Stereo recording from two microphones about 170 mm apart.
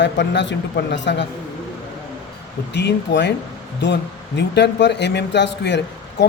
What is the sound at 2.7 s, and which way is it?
Speech, 90° left.